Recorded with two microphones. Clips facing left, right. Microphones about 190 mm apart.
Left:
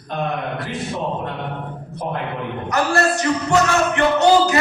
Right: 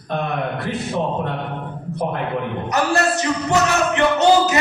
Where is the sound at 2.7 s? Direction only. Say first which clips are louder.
Left 1 dB; 20° right (ahead or behind).